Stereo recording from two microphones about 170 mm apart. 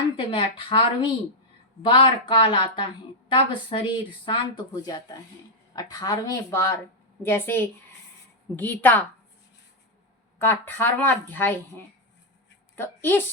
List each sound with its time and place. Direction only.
0.2 s a woman's voice: 30° left (ahead or behind); by 9.0 s 10° left (ahead or behind)
10.3 s a woman's voice: 10° left (ahead or behind)
12.7 s a woman's voice: 15° left (ahead or behind)